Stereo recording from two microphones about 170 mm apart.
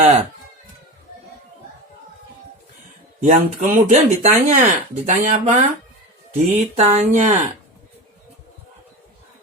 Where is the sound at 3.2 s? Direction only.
45° right (ahead or behind).